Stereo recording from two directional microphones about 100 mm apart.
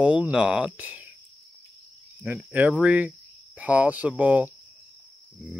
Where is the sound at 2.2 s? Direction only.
15° right (ahead or behind).